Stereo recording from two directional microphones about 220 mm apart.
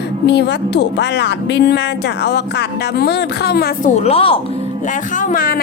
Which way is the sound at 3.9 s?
25° left (ahead or behind).